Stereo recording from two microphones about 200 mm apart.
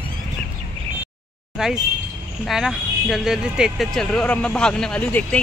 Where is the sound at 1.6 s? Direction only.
5° right (ahead or behind).